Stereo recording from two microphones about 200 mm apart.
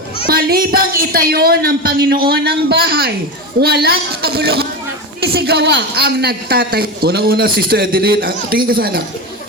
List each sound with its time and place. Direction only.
0.3 s a woman's voice: 50° right (ahead or behind)